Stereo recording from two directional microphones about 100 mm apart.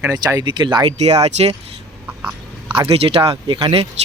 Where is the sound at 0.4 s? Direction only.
50° right (ahead or behind).